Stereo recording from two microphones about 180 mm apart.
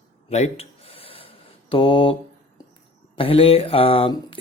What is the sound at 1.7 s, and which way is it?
Speech, 30° left (ahead or behind).